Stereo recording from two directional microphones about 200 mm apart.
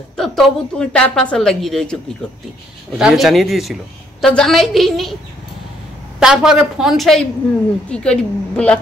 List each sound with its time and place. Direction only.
0.2 s speech: 5° left (ahead or behind)
3.0 s speech: 5° right (ahead or behind)
6.1 s speech: 5° right (ahead or behind)